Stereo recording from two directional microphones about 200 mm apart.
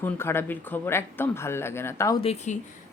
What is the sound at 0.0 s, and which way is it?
Speech, 10° left (ahead or behind).